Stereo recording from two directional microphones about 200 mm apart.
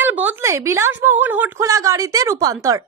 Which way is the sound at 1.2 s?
10° right (ahead or behind).